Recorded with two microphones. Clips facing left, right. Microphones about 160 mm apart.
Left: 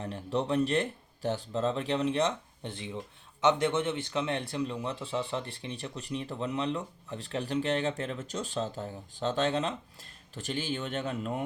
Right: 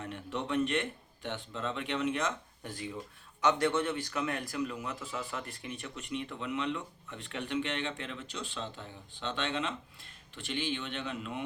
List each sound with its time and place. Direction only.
0.0 s speech: 35° left (ahead or behind)